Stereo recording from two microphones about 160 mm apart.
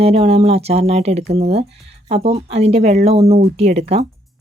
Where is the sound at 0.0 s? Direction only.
40° right (ahead or behind).